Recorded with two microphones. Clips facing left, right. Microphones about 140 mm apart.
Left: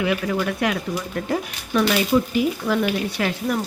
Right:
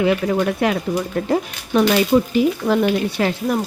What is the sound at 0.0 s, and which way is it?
Speech, 35° right (ahead or behind).